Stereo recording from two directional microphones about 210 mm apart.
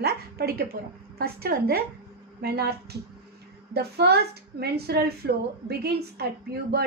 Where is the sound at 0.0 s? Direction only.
45° right (ahead or behind).